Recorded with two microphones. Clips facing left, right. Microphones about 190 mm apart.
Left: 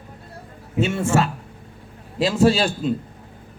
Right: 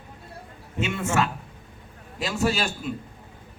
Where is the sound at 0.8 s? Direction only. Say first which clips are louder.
Left 5 dB; 30° left (ahead or behind).